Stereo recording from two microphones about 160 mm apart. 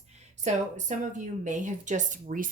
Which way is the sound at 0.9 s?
50° right (ahead or behind).